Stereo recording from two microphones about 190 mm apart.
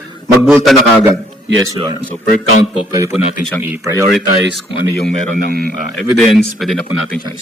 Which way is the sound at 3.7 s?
15° right (ahead or behind).